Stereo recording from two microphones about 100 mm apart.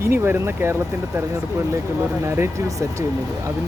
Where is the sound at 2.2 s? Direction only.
25° right (ahead or behind).